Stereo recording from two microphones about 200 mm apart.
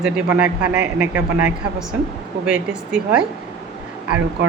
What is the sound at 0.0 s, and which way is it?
A man's voice, 5° right (ahead or behind).